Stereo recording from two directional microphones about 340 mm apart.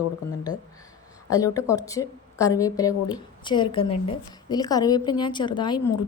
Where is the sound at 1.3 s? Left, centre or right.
Centre.